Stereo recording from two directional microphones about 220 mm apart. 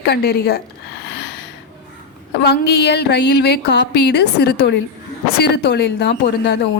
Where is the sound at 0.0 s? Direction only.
45° left (ahead or behind).